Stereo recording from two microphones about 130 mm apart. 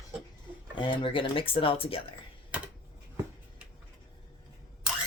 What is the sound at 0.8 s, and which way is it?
Speech, 40° left (ahead or behind).